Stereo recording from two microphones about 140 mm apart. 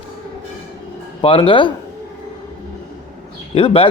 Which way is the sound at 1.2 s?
40° left (ahead or behind).